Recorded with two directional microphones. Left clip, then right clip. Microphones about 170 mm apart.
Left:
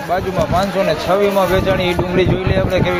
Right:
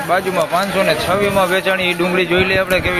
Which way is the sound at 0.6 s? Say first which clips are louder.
Right 1 dB; 20° left (ahead or behind).